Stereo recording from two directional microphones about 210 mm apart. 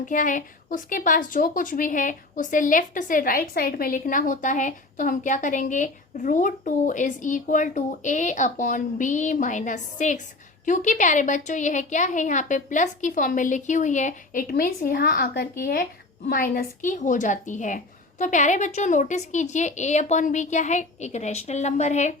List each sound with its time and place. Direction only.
0.0 s a woman's voice: 40° left (ahead or behind)